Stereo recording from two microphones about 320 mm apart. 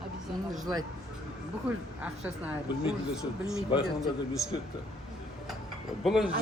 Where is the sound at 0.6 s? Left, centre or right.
Centre.